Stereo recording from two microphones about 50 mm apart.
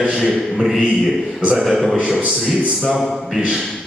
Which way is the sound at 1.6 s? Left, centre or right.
Centre.